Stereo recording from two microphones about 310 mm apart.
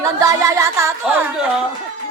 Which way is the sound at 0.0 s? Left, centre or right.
Centre.